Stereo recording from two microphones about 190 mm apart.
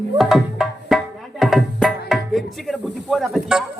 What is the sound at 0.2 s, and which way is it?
Music, centre (ahead or behind).